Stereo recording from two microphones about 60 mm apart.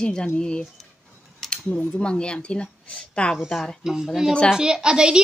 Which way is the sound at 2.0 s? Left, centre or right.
Centre.